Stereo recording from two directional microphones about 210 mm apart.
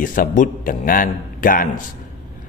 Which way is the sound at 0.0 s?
40° left (ahead or behind).